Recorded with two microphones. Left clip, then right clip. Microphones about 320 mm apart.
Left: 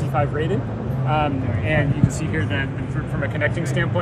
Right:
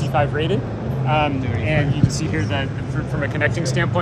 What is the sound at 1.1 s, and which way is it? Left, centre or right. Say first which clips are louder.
Speech: right 2 dB; centre.